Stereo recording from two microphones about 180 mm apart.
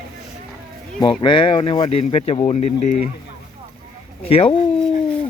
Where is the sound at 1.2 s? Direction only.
25° left (ahead or behind).